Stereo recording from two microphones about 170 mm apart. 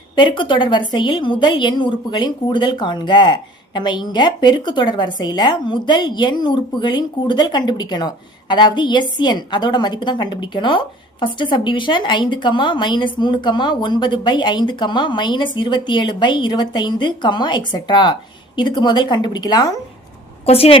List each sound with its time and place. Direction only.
0.2 s a woman's voice: 30° left (ahead or behind)
20.4 s a woman's voice: 35° left (ahead or behind)